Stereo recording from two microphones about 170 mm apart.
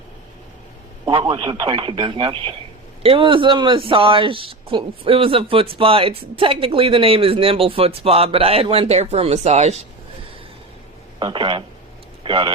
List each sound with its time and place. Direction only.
1.0 s speech: 30° right (ahead or behind)
11.2 s speech: 25° right (ahead or behind)